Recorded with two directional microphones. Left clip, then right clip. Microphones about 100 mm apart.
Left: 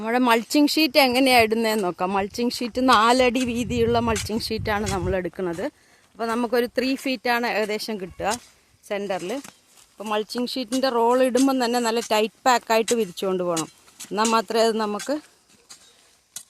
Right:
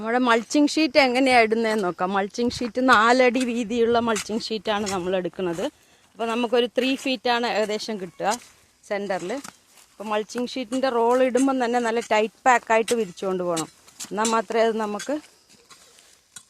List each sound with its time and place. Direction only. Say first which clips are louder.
0.0 s speech: even; 30° left (ahead or behind)
12.8 s speech: left 1 dB; 55° left (ahead or behind)
13.1 s speech: left 1 dB; 35° left (ahead or behind)
14.0 s speech: even; 35° right (ahead or behind)
14.3 s speech: even; 35° left (ahead or behind)